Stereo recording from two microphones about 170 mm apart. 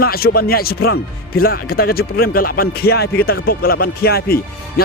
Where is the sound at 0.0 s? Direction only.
65° left (ahead or behind).